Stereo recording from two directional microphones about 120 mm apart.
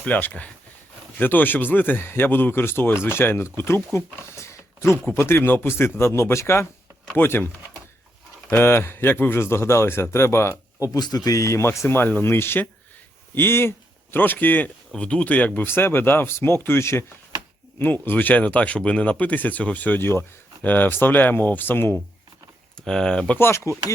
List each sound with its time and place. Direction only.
0.0 s speech: 15° left (ahead or behind)
8.4 s speech: 20° left (ahead or behind)
10.9 s speech: 35° left (ahead or behind); by 21.9 s 20° left (ahead or behind)
22.8 s speech: 5° left (ahead or behind)
23.4 s speech: 25° left (ahead or behind)